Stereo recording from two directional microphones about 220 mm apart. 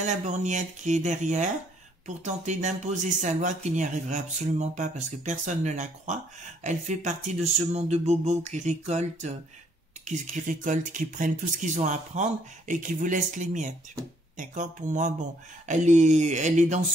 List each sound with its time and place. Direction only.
0.0 s speech: 30° right (ahead or behind)